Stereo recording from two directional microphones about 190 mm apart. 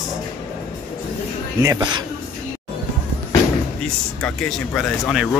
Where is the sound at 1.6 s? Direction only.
25° right (ahead or behind).